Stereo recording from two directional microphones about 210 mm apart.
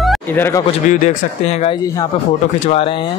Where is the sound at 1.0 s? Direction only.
30° left (ahead or behind).